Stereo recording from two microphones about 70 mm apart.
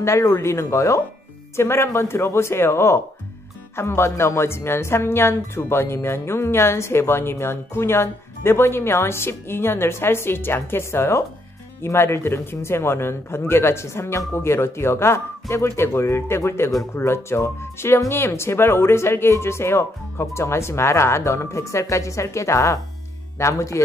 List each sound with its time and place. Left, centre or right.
0.0 s a woman's voice: left